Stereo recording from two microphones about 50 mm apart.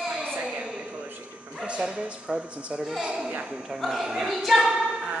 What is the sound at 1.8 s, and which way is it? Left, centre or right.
Speech, centre.